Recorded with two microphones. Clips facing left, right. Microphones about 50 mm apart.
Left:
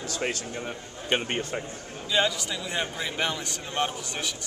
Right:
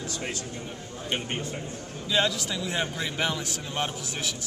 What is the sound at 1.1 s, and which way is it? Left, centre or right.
Speech, left.